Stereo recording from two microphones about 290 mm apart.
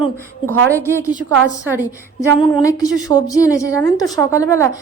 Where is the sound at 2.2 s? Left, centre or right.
Centre.